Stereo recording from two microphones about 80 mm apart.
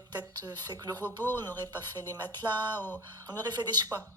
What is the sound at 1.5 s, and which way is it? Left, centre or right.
A woman's voice, right.